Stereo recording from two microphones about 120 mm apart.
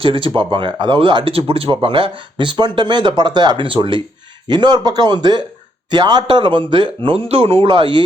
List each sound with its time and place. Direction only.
0.0 s speech: 45° right (ahead or behind)